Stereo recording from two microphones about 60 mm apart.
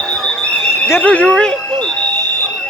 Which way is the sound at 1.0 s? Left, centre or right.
Left.